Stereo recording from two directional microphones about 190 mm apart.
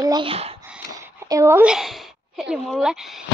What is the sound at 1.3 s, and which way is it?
Speech, 15° right (ahead or behind).